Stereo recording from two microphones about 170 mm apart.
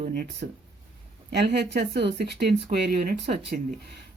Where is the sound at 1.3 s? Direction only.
80° right; by 3.6 s 60° right (ahead or behind).